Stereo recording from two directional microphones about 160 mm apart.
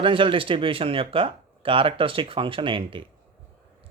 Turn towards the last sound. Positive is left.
turn(degrees=-30)  # may be behind; listen again after turning